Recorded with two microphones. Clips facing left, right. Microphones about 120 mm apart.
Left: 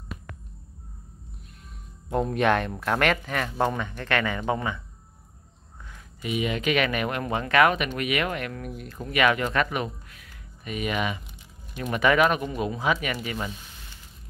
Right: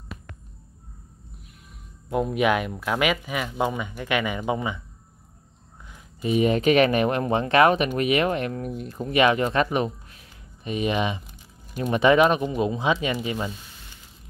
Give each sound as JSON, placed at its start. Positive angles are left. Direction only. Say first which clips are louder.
{"t": 2.0, "sound": "speech", "louder": "right 1 dB", "side_deg": -5}
{"t": 6.2, "sound": "speech", "louder": "right 7 dB", "side_deg": -40}